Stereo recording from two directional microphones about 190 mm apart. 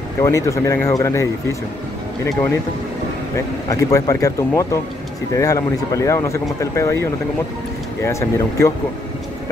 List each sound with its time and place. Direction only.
0.2 s speech: 15° left (ahead or behind)
3.7 s speech: 15° left (ahead or behind)